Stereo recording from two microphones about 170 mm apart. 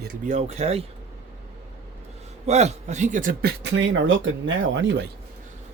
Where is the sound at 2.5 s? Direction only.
40° right (ahead or behind).